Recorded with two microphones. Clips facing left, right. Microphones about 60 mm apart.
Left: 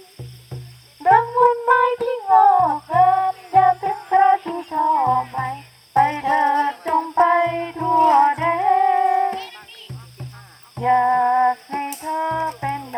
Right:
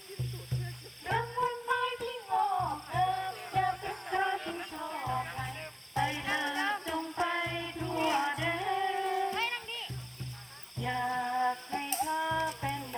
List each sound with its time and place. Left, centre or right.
1.0 s child singing: left
4.1 s music: left
9.4 s music: right
10.8 s female singing: left
12.0 s music: left
12.5 s music: left